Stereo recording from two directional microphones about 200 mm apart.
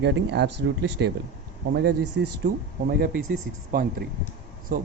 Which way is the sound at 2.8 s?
45° right (ahead or behind).